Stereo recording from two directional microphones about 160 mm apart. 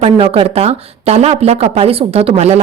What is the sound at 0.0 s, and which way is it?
Speech, 35° right (ahead or behind).